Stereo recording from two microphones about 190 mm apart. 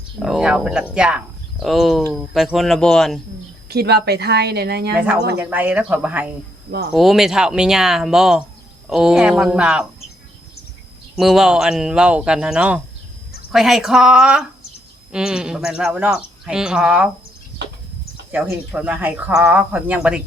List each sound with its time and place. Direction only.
0.2 s speech: 5° right (ahead or behind)
3.7 s speech: 60° right (ahead or behind)
5.4 s speech: 10° right (ahead or behind)
11.2 s speech: centre (ahead or behind)
18.3 s speech: 10° right (ahead or behind)